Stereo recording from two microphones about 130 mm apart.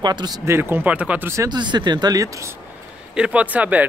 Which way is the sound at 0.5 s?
15° right (ahead or behind).